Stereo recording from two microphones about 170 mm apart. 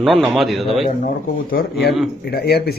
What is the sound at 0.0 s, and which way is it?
Speech, centre (ahead or behind).